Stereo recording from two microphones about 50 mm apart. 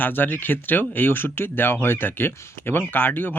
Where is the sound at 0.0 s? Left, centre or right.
Left.